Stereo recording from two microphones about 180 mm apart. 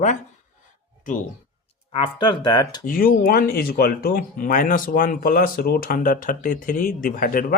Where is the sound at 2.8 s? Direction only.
50° left (ahead or behind).